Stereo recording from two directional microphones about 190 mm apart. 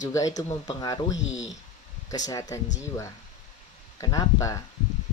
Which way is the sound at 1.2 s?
5° right (ahead or behind).